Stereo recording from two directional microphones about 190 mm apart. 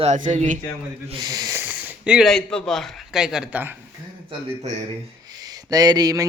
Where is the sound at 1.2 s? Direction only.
20° right (ahead or behind).